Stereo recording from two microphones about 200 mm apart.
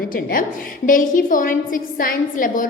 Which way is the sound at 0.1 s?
45° left (ahead or behind).